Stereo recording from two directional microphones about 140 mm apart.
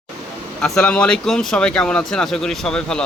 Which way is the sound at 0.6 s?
5° left (ahead or behind).